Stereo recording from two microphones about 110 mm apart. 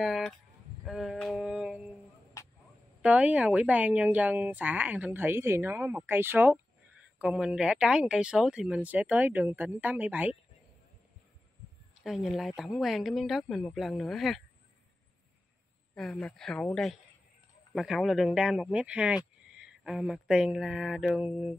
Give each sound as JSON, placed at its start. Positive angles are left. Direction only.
{"t": 0.0, "sound": "speech", "side_deg": 0}
{"t": 1.4, "sound": "a sound", "side_deg": -5}
{"t": 2.4, "sound": "a sound", "side_deg": 30}
{"t": 3.0, "sound": "a woman's voice", "side_deg": -15}
{"t": 12.0, "sound": "speech", "side_deg": 0}
{"t": 15.9, "sound": "a woman's voice", "side_deg": 5}